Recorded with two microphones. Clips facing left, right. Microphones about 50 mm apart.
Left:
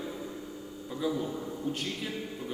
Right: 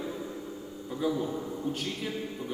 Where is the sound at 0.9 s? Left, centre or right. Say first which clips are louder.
Right 2 dB; centre.